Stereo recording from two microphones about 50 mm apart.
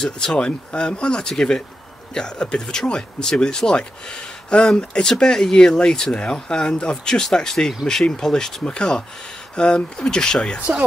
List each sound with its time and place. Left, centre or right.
0.0 s speech: centre